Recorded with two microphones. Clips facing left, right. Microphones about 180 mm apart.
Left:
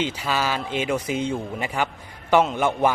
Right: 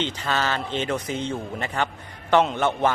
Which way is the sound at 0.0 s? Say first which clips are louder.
Left 1 dB; 10° left (ahead or behind).